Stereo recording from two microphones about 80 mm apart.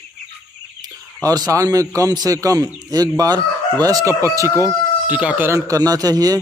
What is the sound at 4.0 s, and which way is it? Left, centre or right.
Speech, right.